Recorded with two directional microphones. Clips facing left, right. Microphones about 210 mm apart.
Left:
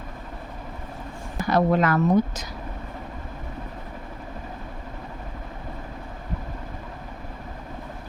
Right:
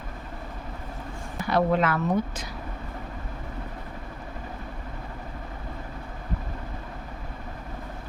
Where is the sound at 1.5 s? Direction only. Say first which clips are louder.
Left 2 dB; 40° left (ahead or behind).